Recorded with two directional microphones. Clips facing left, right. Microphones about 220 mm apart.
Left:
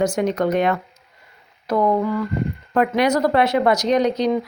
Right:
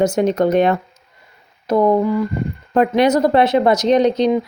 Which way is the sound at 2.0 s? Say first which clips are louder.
Right 3 dB; 15° right (ahead or behind).